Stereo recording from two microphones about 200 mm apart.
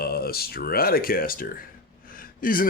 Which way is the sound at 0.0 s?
50° left (ahead or behind).